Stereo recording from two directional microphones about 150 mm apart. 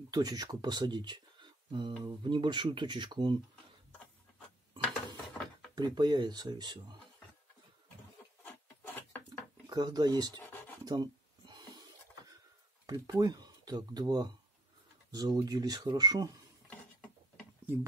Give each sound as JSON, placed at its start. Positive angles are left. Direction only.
{"t": 0.1, "sound": "speech", "side_deg": -25}
{"t": 5.8, "sound": "speech", "side_deg": -30}
{"t": 8.8, "sound": "a sound", "side_deg": 15}
{"t": 9.7, "sound": "speech", "side_deg": -30}
{"t": 10.9, "sound": "a sound", "side_deg": -25}
{"t": 12.8, "sound": "speech", "side_deg": -25}